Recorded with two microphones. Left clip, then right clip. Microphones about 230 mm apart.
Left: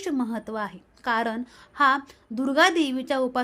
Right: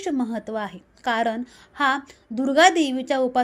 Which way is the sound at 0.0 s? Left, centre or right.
Centre.